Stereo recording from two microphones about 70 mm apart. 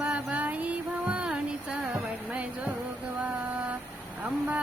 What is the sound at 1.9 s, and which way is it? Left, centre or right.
Speech, centre.